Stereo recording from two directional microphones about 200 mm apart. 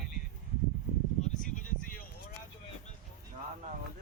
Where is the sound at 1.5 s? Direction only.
45° left (ahead or behind).